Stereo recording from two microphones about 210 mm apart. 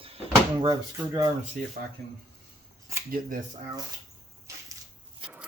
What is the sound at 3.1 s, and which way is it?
Speech, 40° right (ahead or behind).